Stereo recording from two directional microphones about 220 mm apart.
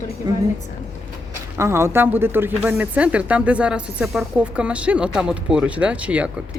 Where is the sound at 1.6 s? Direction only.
10° right (ahead or behind).